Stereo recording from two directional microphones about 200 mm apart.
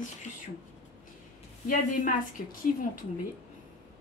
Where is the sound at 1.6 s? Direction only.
40° left (ahead or behind).